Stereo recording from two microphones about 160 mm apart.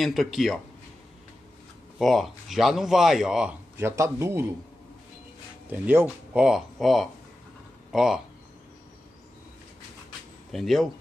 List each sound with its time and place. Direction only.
0.0 s speech: centre (ahead or behind)
2.0 s speech: centre (ahead or behind)
3.7 s speech: 15° right (ahead or behind)
5.7 s speech: 10° right (ahead or behind)
10.5 s speech: centre (ahead or behind)